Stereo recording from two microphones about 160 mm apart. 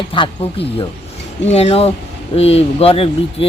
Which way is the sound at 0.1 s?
35° left (ahead or behind).